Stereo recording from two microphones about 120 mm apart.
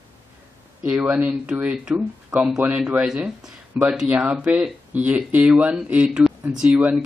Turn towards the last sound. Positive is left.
turn(degrees=-10)  # may be behind; listen again after turning